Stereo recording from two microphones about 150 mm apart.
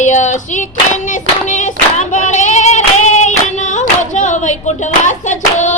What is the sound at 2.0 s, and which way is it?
Hands, 55° left (ahead or behind).